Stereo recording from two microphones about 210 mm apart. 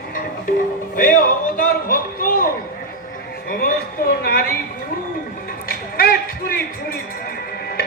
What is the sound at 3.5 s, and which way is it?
Speech, 45° left (ahead or behind).